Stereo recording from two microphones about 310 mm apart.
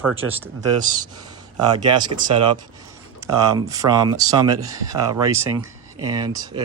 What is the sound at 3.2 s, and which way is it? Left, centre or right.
Speech, centre.